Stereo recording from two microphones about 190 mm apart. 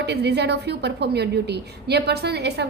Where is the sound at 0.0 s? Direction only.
60° right (ahead or behind).